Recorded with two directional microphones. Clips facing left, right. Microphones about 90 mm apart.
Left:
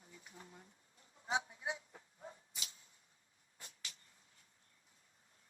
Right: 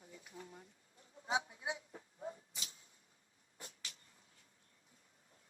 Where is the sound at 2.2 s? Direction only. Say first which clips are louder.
Right 6 dB; 35° right (ahead or behind).